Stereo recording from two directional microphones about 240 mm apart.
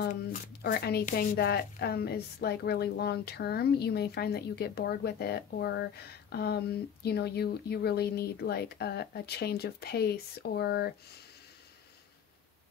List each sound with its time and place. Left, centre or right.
0.1 s speech: left